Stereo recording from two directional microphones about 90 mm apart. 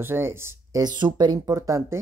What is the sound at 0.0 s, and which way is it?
Speech, 25° right (ahead or behind).